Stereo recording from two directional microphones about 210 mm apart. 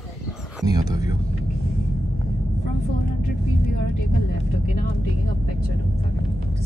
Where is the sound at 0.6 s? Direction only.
15° right (ahead or behind).